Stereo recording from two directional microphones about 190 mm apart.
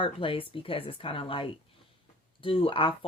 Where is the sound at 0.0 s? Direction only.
30° left (ahead or behind).